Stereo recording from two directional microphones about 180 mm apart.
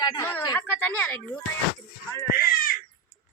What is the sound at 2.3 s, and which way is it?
Speech, 50° left (ahead or behind).